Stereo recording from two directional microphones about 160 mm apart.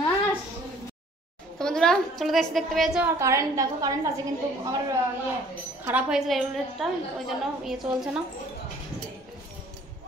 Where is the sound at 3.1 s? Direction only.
20° right (ahead or behind).